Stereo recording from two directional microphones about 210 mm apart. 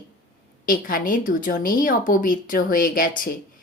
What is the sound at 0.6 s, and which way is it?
A woman's voice, 45° left (ahead or behind).